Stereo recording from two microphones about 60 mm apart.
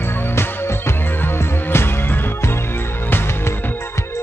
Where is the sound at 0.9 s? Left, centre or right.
Left.